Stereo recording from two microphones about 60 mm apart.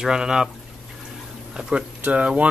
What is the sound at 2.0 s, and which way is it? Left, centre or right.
Speech, right.